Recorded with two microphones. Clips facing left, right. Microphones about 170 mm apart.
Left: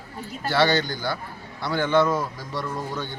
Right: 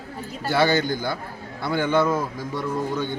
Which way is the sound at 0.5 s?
10° right (ahead or behind).